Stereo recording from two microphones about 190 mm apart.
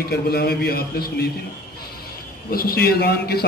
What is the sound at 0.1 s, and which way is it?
A man's voice, 55° left (ahead or behind).